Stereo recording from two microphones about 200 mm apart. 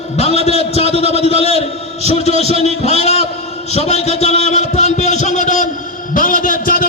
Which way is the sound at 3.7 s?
30° left (ahead or behind).